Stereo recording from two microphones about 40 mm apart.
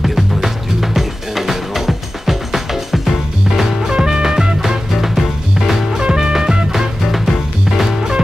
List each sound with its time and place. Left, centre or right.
0.0 s music: centre
5.9 s music: centre
7.1 s music: centre